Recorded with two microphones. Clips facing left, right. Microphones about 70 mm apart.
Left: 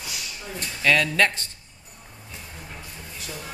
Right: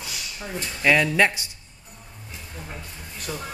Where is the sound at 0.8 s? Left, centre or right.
Centre.